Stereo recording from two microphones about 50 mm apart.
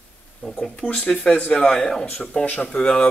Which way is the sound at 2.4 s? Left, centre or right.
Left.